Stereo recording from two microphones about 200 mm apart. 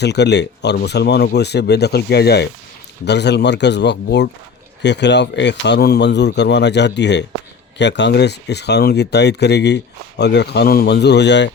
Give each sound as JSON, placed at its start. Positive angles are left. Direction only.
{"t": 0.0, "sound": "speech", "side_deg": 60}